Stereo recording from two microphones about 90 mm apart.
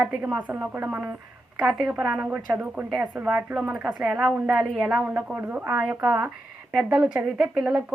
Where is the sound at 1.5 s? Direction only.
5° right (ahead or behind).